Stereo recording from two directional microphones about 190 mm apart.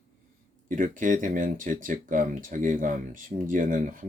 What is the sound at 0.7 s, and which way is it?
Speech, 45° right (ahead or behind).